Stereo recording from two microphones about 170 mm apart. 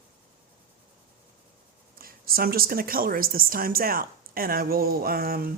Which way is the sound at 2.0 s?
60° right (ahead or behind).